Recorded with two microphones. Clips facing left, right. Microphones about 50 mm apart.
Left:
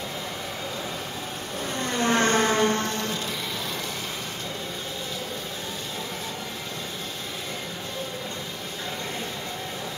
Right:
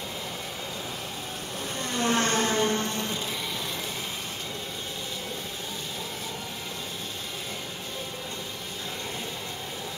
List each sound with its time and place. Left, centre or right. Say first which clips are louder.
1.8 s vehicle: left 3 dB; left
2.3 s a sound: left 4 dB; left
2.7 s music: left 2 dB; left